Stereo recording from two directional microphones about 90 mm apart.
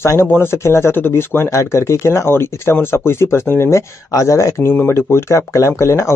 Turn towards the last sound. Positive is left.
turn(degrees=30)  # may be behind; listen again after turning